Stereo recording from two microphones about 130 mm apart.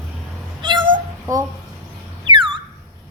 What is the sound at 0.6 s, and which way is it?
Cat, 40° right (ahead or behind).